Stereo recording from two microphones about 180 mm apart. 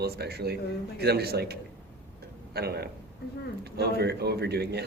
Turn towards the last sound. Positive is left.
turn(degrees=-65)  # may be behind; listen again after turning